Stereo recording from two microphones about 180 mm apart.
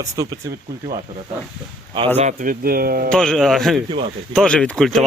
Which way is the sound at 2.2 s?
45° right (ahead or behind).